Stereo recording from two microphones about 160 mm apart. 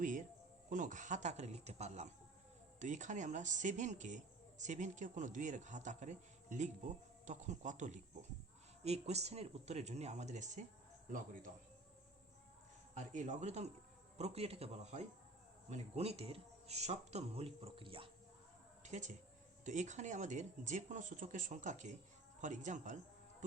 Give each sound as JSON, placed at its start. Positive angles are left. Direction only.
{"t": 0.0, "sound": "speech", "side_deg": -55}
{"t": 12.9, "sound": "speech", "side_deg": -45}
{"t": 18.8, "sound": "a sound", "side_deg": -50}
{"t": 19.6, "sound": "speech", "side_deg": -50}